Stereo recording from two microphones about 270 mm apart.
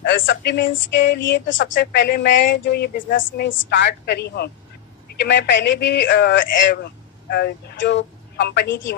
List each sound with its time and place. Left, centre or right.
0.0 s speech: left